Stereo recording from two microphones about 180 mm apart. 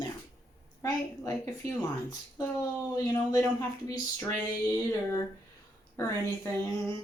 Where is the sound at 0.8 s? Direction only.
15° left (ahead or behind).